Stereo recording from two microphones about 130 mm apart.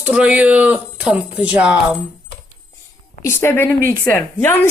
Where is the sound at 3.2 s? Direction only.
20° left (ahead or behind).